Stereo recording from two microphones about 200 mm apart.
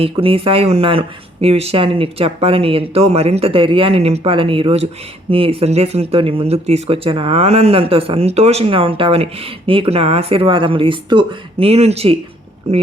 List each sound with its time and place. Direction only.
0.0 s speech: 25° right (ahead or behind)